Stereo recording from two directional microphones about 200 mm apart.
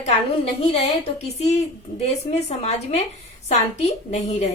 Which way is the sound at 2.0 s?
35° left (ahead or behind).